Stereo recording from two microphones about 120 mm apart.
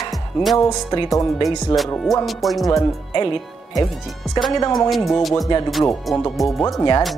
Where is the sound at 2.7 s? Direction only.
30° left (ahead or behind).